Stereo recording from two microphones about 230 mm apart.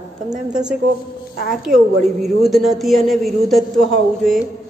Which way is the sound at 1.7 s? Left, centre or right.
Right.